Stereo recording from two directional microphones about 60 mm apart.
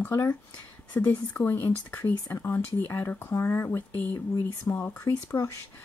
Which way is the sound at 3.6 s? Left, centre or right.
Left.